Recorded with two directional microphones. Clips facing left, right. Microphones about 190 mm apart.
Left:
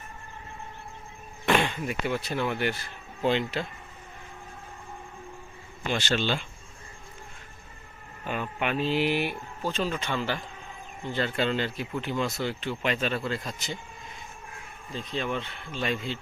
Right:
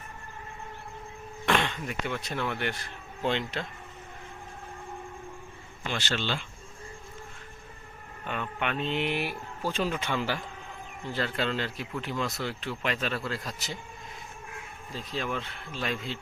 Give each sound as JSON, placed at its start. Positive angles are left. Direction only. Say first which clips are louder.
{"t": 1.5, "sound": "speech", "louder": "left 3 dB", "side_deg": 10}
{"t": 5.8, "sound": "speech", "louder": "left 4 dB", "side_deg": 15}
{"t": 8.2, "sound": "speech", "louder": "left 2 dB", "side_deg": 5}
{"t": 9.7, "sound": "speech", "louder": "even", "side_deg": -10}
{"t": 11.1, "sound": "speech", "louder": "left 3 dB", "side_deg": 0}
{"t": 14.9, "sound": "speech", "louder": "left 2 dB", "side_deg": -5}